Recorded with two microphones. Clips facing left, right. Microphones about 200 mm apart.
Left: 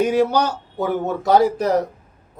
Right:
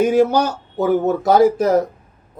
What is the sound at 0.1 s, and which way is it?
Speech, 45° right (ahead or behind).